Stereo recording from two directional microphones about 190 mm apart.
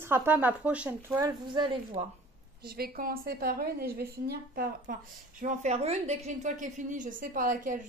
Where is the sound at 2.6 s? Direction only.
50° right (ahead or behind).